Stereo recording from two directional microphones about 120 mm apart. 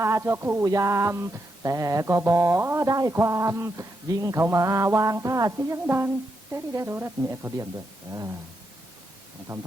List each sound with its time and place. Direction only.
0.0 s speech: 25° right (ahead or behind)
9.5 s speech: 25° right (ahead or behind)